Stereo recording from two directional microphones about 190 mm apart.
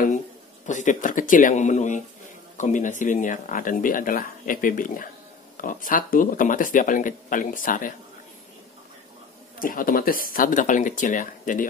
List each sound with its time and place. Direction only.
0.7 s speech: 40° left (ahead or behind)
9.6 s speech: 45° left (ahead or behind)